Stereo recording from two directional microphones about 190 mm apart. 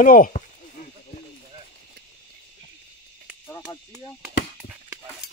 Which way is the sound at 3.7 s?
20° left (ahead or behind).